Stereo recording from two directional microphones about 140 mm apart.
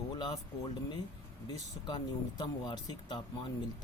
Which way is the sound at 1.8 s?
30° left (ahead or behind).